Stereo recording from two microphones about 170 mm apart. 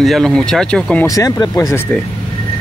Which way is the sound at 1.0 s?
20° left (ahead or behind).